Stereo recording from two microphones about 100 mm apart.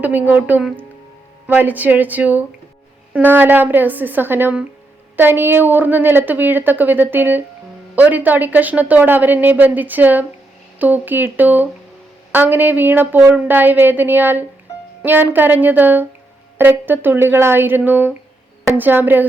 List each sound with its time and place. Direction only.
0.0 s a woman's voice: 15° right (ahead or behind)